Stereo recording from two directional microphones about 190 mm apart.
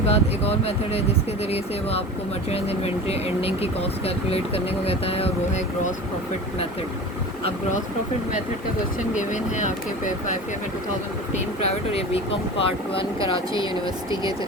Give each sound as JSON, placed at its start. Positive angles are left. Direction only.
{"t": 0.1, "sound": "speech", "side_deg": 30}
{"t": 9.1, "sound": "speech", "side_deg": 40}
{"t": 11.6, "sound": "speech", "side_deg": 30}